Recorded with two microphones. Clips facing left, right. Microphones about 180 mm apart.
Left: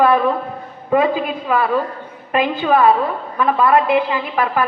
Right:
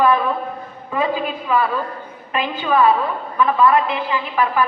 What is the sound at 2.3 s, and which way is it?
A woman's voice, 50° left (ahead or behind).